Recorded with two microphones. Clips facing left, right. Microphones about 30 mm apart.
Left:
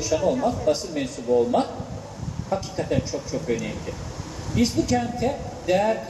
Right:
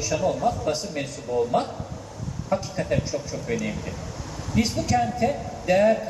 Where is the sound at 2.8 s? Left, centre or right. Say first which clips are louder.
Even; centre.